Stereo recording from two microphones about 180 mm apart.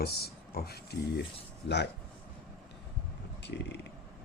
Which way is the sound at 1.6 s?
75° left (ahead or behind).